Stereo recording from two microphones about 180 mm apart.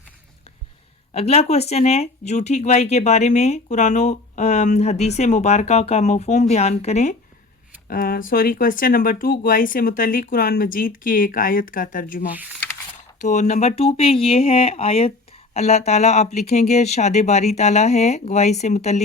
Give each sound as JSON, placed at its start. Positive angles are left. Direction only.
{"t": 1.1, "sound": "speech", "side_deg": 35}
{"t": 7.9, "sound": "speech", "side_deg": 55}